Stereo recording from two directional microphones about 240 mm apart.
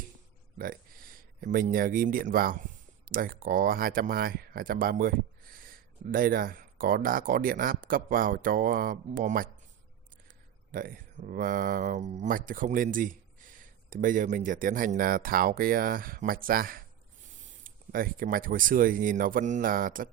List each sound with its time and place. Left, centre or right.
0.6 s speech: right